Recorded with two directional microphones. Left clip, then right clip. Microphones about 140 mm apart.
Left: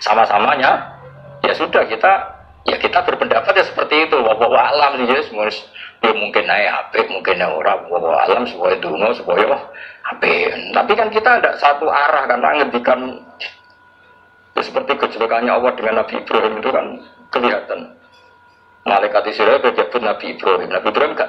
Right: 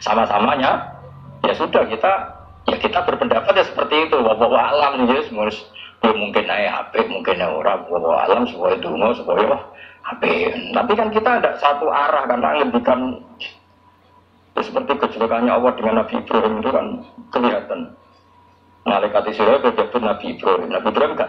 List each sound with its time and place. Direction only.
0.0 s a man's voice: 30° left (ahead or behind)
14.5 s a man's voice: 30° left (ahead or behind)
18.9 s a man's voice: 35° left (ahead or behind)